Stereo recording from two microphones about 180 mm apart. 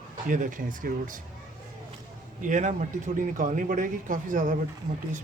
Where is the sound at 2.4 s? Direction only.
45° right (ahead or behind).